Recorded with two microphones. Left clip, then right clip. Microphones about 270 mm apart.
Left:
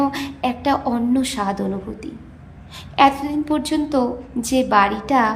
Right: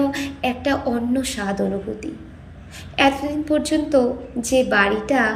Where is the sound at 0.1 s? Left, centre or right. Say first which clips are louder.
Even; centre.